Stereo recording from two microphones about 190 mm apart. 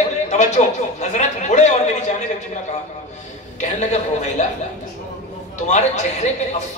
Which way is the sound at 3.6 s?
40° left (ahead or behind).